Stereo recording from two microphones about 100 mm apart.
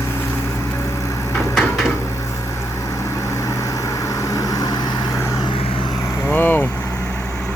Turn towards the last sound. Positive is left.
turn(degrees=20)  # may be behind; listen again after turning